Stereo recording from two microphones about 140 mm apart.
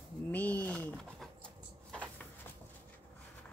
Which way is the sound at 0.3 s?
10° left (ahead or behind).